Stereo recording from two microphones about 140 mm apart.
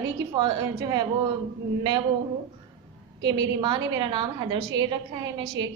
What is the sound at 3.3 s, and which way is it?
A woman's voice, 30° right (ahead or behind).